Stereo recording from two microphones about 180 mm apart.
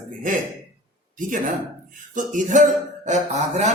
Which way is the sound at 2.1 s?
45° right (ahead or behind).